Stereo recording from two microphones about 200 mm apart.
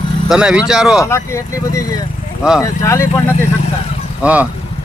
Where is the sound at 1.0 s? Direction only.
15° left (ahead or behind).